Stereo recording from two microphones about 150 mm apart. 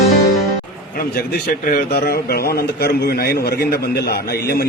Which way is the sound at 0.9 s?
75° left (ahead or behind).